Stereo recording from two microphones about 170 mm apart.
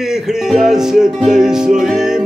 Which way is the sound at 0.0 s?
5° right (ahead or behind).